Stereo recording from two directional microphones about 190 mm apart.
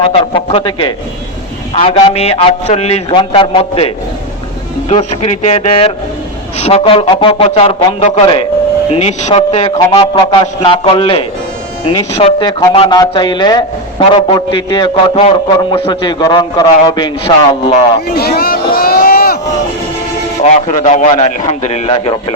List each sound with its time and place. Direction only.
0.0 s a man's voice: 30° left (ahead or behind)
18.1 s a sound: 55° left (ahead or behind)
20.4 s a man's voice: 40° left (ahead or behind)